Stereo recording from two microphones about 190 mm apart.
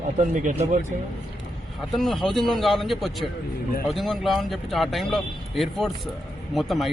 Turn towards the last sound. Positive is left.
turn(degrees=0)  # may be behind; listen again after turning